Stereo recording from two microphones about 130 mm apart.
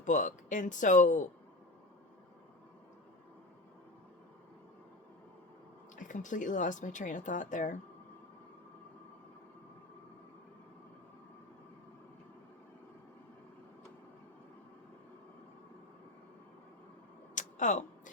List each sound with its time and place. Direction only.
0.0 s speech: 75° left (ahead or behind)
6.0 s speech: 75° left (ahead or behind)
17.3 s a sound: 75° left (ahead or behind)